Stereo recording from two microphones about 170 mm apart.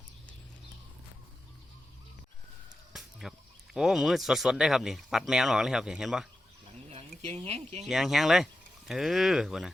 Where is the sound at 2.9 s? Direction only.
Centre (ahead or behind).